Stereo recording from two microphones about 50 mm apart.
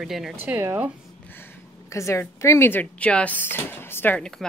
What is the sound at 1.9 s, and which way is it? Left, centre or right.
Speech, left.